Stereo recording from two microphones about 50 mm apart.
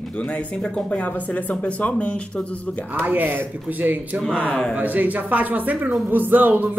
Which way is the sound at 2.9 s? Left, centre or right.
Right.